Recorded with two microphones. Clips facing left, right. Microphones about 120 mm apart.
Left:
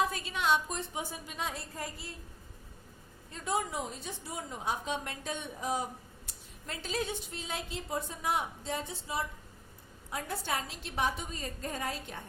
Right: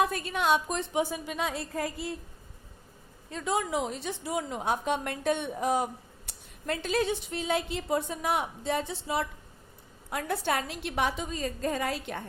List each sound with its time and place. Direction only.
0.0 s a woman's voice: 55° right (ahead or behind)
0.7 s a woman's voice: 80° right
3.3 s a woman's voice: 90° right